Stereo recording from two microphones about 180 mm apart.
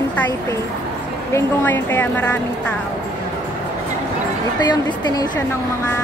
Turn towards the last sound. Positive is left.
turn(degrees=25)  # may be behind; listen again after turning